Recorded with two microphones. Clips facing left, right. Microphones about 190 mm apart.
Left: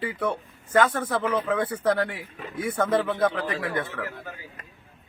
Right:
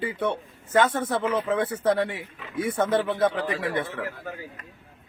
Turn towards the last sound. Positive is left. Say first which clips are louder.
# right 1 dB
turn(degrees=-25)  # may be behind; listen again after turning